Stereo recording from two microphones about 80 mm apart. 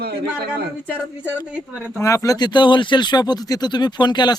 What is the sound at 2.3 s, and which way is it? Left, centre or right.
Speech, left.